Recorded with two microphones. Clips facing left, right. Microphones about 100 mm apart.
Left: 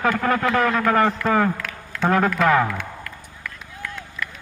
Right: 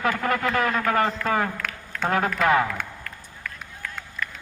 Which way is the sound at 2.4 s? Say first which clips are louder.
Left 1 dB; 45° left (ahead or behind).